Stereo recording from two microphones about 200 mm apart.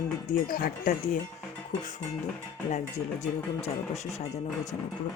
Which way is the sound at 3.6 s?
35° left (ahead or behind).